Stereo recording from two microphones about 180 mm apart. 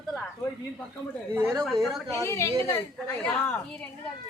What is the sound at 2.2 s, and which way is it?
Speech, 15° left (ahead or behind).